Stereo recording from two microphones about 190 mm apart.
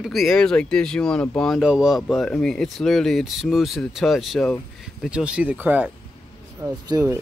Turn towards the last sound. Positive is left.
turn(degrees=-20)  # may be behind; listen again after turning